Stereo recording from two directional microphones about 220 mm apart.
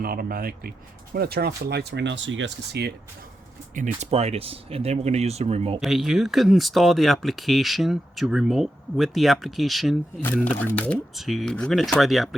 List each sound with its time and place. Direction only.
0.0 s speech: 45° right (ahead or behind)
3.8 s speech: 30° right (ahead or behind)
5.8 s speech: centre (ahead or behind)